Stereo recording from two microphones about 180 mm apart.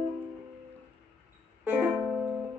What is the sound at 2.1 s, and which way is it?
Music, centre (ahead or behind).